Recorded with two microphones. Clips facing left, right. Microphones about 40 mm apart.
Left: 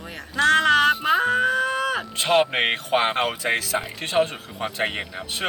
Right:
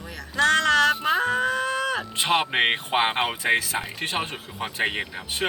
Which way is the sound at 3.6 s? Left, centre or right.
Right.